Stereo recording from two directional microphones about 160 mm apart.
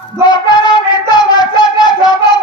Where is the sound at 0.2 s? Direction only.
25° left (ahead or behind).